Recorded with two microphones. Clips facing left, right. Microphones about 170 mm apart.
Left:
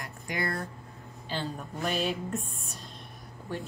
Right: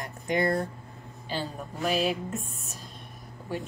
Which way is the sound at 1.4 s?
Centre (ahead or behind).